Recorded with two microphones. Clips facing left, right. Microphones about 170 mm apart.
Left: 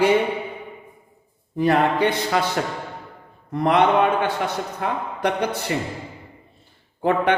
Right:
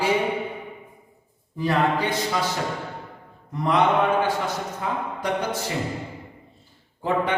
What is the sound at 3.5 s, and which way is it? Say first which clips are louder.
A man's voice: left 3 dB; 65° left (ahead or behind).